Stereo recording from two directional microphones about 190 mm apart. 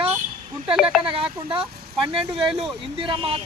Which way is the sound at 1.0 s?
30° right (ahead or behind).